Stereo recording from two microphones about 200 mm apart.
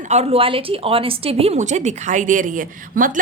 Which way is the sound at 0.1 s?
30° right (ahead or behind).